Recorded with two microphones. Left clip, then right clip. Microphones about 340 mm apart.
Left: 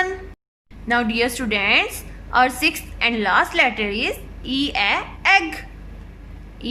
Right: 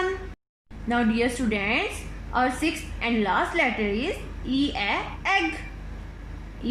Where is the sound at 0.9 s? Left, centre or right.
Left.